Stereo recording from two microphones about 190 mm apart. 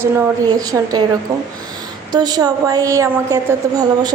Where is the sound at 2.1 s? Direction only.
20° right (ahead or behind).